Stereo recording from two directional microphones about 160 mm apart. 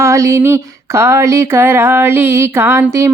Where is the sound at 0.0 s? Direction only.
20° right (ahead or behind).